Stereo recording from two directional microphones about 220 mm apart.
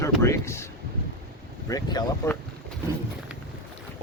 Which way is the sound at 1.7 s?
15° left (ahead or behind).